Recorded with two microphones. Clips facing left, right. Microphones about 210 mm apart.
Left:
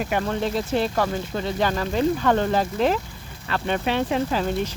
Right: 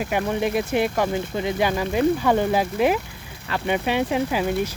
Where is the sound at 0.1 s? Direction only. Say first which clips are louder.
Right 4 dB; 15° right (ahead or behind).